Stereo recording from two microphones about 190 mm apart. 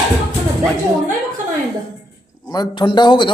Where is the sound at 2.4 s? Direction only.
20° left (ahead or behind).